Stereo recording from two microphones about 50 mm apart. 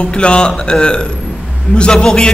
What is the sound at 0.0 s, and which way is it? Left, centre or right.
A man's voice, centre.